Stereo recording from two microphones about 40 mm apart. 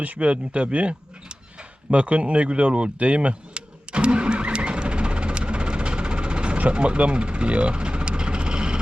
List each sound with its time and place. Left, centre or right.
0.0 s speech: right
1.9 s vehicle: right